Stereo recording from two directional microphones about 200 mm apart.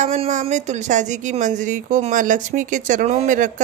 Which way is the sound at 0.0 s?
35° right (ahead or behind).